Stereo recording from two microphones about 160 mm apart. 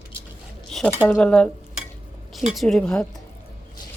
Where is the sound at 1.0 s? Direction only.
10° left (ahead or behind).